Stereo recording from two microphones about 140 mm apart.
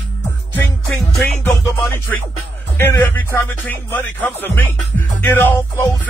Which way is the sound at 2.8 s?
15° left (ahead or behind).